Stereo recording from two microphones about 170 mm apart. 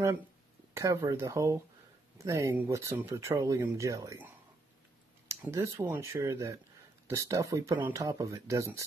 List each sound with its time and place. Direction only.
0.7 s speech: 15° right (ahead or behind)
5.3 s speech: 15° right (ahead or behind)